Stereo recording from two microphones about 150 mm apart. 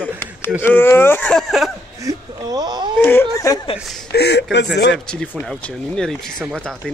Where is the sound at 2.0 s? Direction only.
25° right (ahead or behind).